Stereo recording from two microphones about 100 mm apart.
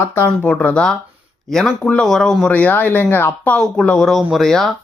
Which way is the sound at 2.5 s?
15° left (ahead or behind).